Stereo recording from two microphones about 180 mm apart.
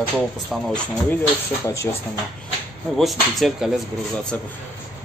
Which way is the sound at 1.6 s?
15° left (ahead or behind).